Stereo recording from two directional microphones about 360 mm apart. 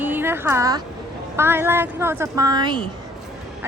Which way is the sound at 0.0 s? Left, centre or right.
Centre.